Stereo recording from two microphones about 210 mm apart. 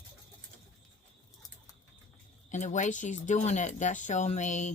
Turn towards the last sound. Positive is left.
turn(degrees=35)  # may be behind; listen again after turning